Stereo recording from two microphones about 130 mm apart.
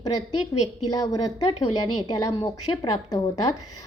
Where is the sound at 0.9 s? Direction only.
30° left (ahead or behind).